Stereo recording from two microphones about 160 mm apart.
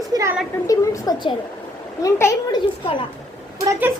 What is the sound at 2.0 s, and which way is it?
Speech, 20° left (ahead or behind).